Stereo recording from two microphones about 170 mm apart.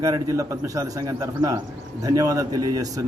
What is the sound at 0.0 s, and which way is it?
A man's voice, 20° right (ahead or behind).